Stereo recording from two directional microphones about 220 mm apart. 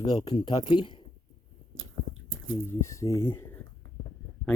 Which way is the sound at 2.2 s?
65° right (ahead or behind).